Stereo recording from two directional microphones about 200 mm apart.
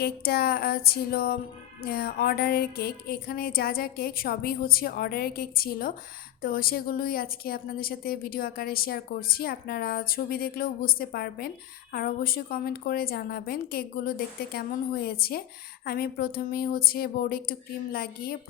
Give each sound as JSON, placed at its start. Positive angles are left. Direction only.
{"t": 0.0, "sound": "a woman's voice", "side_deg": 50}